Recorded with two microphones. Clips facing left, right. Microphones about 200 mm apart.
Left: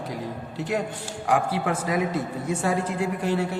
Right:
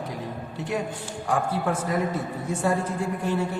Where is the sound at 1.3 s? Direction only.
85° left.